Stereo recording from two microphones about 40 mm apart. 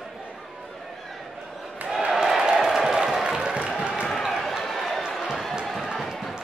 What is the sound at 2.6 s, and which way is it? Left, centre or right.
Music, centre.